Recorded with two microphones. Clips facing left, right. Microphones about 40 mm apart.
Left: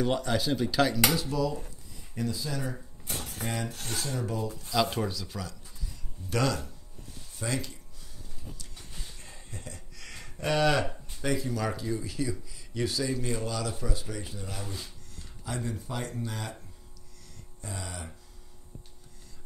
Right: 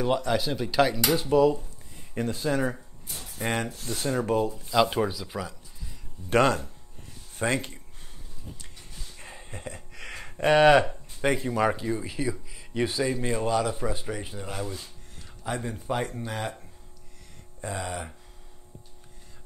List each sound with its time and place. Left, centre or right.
0.0 s speech: centre
1.1 s speech: right
3.1 s a sound: left
3.3 s speech: right
3.7 s speech: left
4.0 s speech: right
4.6 s speech: right
6.3 s speech: right
9.2 s a sound: right
11.1 s speech: right
17.6 s speech: right